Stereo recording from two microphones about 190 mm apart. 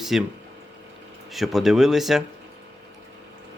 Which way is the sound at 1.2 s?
Centre (ahead or behind).